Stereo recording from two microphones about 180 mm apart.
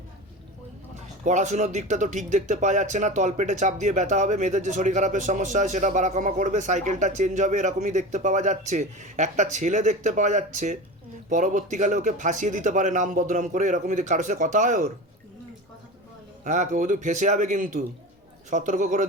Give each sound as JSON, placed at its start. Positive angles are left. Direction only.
{"t": 0.9, "sound": "speech", "side_deg": -40}
{"t": 16.4, "sound": "speech", "side_deg": -45}